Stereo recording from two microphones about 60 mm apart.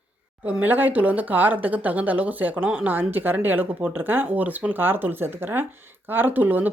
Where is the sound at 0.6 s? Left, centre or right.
Right.